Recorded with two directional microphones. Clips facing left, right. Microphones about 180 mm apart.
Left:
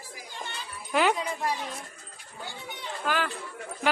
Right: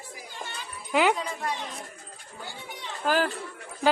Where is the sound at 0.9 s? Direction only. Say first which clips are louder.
Right 1 dB; 15° right (ahead or behind).